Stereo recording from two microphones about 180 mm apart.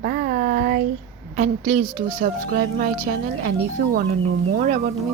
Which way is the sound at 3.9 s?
50° right (ahead or behind).